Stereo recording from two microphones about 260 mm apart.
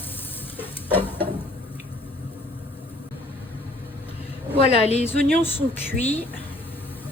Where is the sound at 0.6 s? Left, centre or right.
Centre.